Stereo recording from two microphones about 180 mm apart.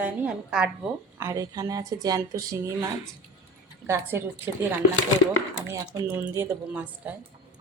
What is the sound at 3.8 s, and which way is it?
Speech, 15° right (ahead or behind).